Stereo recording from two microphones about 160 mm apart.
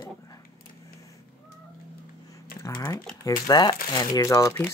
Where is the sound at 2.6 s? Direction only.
20° left (ahead or behind).